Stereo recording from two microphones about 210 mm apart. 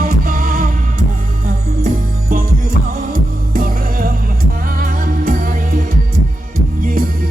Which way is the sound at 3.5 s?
45° right (ahead or behind).